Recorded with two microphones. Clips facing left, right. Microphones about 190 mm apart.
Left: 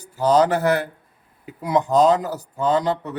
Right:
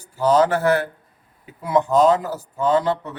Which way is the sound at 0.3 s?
15° left (ahead or behind).